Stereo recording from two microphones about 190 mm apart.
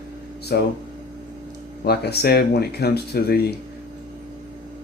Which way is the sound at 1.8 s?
55° left (ahead or behind).